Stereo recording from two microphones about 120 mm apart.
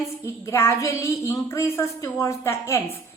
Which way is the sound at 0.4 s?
25° left (ahead or behind).